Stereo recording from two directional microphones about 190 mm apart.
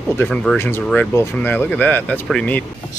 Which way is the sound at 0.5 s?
10° left (ahead or behind).